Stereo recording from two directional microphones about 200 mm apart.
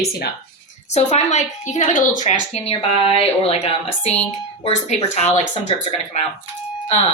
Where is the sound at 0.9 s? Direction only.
35° left (ahead or behind).